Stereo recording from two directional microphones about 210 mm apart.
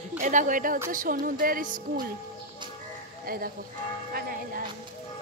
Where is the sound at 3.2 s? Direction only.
45° right (ahead or behind).